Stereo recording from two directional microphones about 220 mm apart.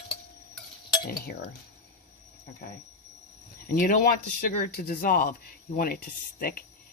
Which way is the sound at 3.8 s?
40° left (ahead or behind).